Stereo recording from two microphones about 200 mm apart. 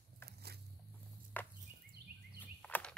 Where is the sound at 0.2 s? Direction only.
55° right (ahead or behind).